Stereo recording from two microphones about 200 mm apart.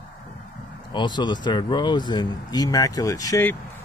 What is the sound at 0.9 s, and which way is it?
Speech, 20° left (ahead or behind).